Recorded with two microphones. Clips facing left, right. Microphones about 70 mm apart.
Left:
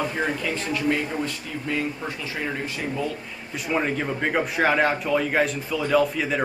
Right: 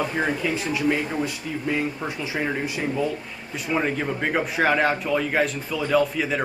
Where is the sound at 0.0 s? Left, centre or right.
Centre.